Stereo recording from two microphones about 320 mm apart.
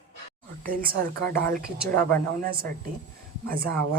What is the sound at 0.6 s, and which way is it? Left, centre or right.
A woman's voice, right.